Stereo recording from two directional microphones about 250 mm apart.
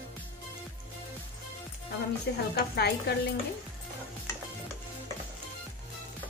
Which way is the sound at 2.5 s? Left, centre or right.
Left.